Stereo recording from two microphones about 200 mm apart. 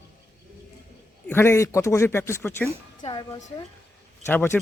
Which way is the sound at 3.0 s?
20° left (ahead or behind).